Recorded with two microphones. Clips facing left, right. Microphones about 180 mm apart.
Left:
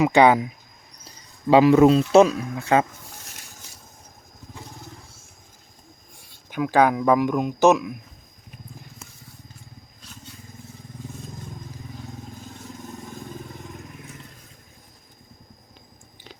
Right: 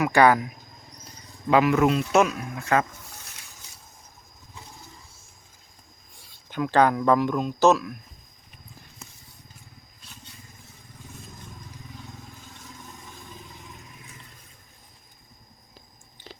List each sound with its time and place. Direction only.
0.0 s speech: 20° left (ahead or behind)
1.5 s speech: 30° left (ahead or behind)
6.5 s speech: 10° left (ahead or behind)